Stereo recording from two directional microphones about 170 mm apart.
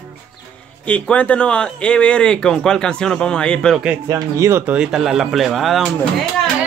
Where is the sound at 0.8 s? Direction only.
5° left (ahead or behind).